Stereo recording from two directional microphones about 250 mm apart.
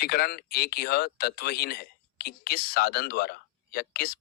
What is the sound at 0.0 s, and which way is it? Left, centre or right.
Speech, left.